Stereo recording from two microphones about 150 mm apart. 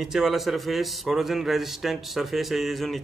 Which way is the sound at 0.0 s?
Centre (ahead or behind).